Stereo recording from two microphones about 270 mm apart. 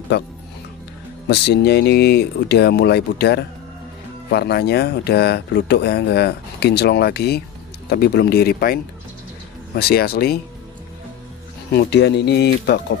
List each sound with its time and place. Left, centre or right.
0.1 s speech: left
11.7 s speech: left